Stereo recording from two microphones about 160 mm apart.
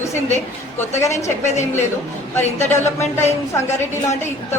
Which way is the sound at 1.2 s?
45° left (ahead or behind).